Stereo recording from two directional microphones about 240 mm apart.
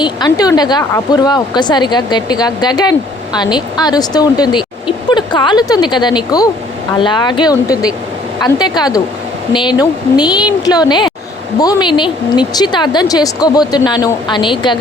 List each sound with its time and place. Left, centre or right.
0.0 s a woman's voice: centre